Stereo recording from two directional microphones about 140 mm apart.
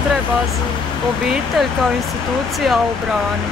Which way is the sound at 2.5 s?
Centre (ahead or behind).